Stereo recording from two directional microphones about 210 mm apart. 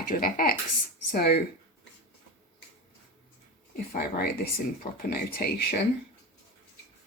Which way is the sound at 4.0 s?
45° left (ahead or behind).